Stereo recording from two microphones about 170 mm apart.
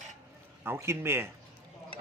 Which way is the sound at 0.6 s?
15° right (ahead or behind).